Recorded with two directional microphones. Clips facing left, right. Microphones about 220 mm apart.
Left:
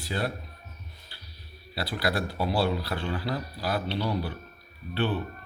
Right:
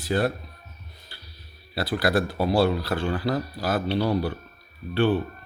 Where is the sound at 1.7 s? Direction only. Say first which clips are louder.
Right 6 dB; 50° right (ahead or behind).